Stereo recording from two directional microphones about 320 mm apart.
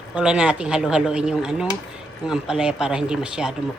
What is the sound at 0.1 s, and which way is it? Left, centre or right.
Speech, centre.